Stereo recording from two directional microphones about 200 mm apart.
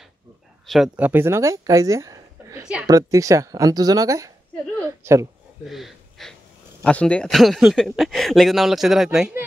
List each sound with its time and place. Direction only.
0.7 s a woman's voice: centre (ahead or behind)
2.9 s speech: 15° right (ahead or behind)
5.7 s speech: centre (ahead or behind)